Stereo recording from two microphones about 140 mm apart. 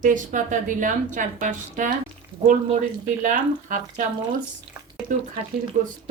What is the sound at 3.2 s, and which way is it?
Speech, 70° right (ahead or behind).